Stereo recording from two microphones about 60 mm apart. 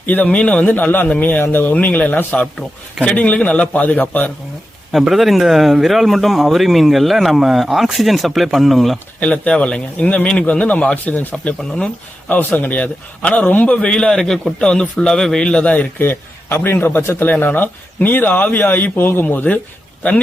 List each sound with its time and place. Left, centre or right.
0.0 s a man's voice: left
4.9 s speech: centre
9.2 s a man's voice: left
13.9 s a man's voice: centre
16.0 s a man's voice: left
17.0 s speech: left
17.2 s speech: left